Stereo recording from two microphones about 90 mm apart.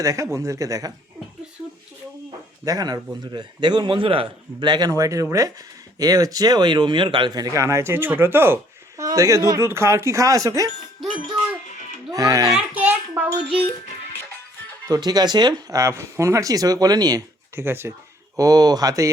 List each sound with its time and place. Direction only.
0.0 s speech: 40° right (ahead or behind)
2.6 s speech: 45° right (ahead or behind)
3.3 s a man's voice: 55° right (ahead or behind); by 4.7 s 80° right
4.7 s speech: 45° right (ahead or behind); by 8.5 s 25° right (ahead or behind)
9.0 s speech: 35° right (ahead or behind)
12.1 s speech: 45° right (ahead or behind)
12.5 s a sound: 20° right (ahead or behind)
14.8 s speech: 50° right (ahead or behind)
15.7 s speech: 35° right (ahead or behind)
17.5 s speech: 30° right (ahead or behind)
18.3 s speech: 45° right (ahead or behind)